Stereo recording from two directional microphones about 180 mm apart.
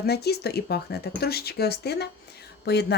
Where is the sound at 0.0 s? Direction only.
65° left (ahead or behind).